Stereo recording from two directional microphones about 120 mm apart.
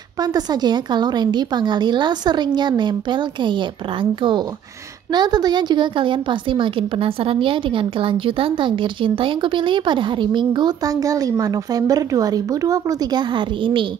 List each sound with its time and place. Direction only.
0.2 s a woman's voice: 35° right (ahead or behind)